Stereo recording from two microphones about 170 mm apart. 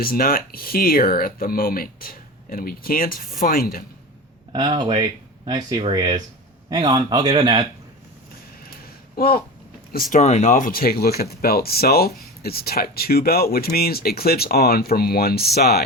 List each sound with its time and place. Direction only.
0.0 s speech: 60° left (ahead or behind)
4.5 s a man's voice: 25° right (ahead or behind)
9.1 s a sound: 60° left (ahead or behind)
9.9 s speech: 45° left (ahead or behind); by 15.8 s 65° left (ahead or behind)